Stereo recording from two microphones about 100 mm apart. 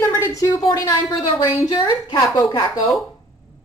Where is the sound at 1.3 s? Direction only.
55° left (ahead or behind).